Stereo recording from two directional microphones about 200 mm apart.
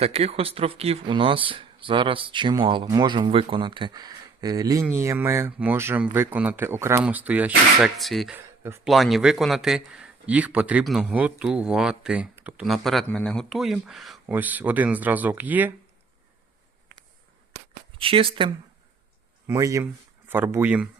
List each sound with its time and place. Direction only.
0.0 s speech: 30° right (ahead or behind); by 8.4 s centre (ahead or behind)
8.4 s speech: 10° right (ahead or behind)
8.9 s a man's voice: centre (ahead or behind)
17.9 s speech: 25° right (ahead or behind)
19.5 s speech: 15° right (ahead or behind)